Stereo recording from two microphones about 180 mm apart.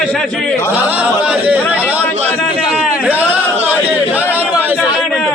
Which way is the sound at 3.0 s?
10° right (ahead or behind).